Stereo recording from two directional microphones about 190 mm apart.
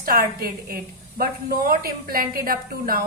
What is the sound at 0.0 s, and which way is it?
A woman's voice, 50° right (ahead or behind).